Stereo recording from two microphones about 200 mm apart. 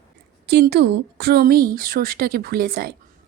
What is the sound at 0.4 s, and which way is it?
A woman's voice, 55° right (ahead or behind).